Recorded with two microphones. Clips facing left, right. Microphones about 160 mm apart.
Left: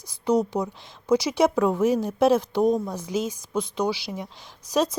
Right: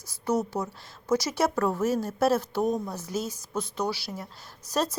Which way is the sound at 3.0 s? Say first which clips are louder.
Left 5 dB; 15° left (ahead or behind).